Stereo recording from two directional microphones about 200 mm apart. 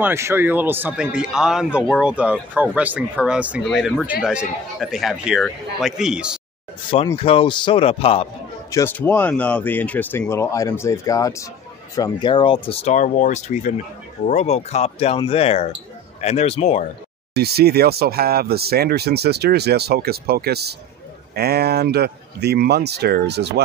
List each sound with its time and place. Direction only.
0.0 s a man's voice: 15° right (ahead or behind)
7.2 s speech: 30° left (ahead or behind)
8.7 s speech: 10° left (ahead or behind); by 16.8 s 35° left (ahead or behind)
17.3 s speech: 55° right (ahead or behind)